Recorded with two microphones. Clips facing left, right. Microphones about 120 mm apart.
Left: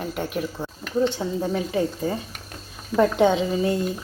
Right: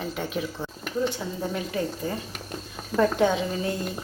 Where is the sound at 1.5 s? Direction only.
20° left (ahead or behind).